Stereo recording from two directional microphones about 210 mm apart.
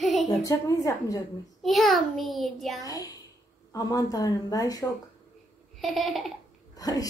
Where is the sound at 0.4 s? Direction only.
15° left (ahead or behind).